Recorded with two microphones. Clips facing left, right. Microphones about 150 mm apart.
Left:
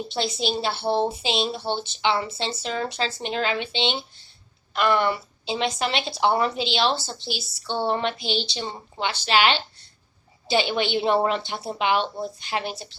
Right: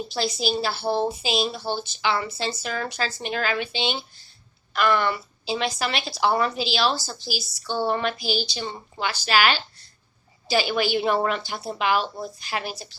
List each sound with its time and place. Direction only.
0.1 s a woman's voice: 25° left (ahead or behind)